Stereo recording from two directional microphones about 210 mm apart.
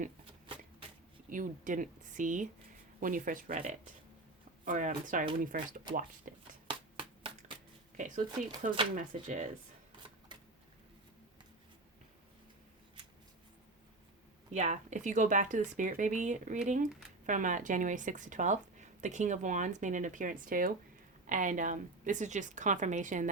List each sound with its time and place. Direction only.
1.3 s speech: 40° right (ahead or behind)
7.2 s shuffling cards: 25° right (ahead or behind)
7.9 s speech: 40° right (ahead or behind)
14.5 s speech: 35° right (ahead or behind)